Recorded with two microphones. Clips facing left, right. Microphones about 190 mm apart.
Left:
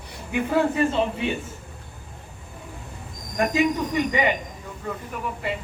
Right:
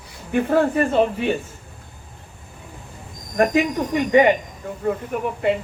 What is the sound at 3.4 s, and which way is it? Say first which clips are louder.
Speech: right 3 dB; 55° right (ahead or behind).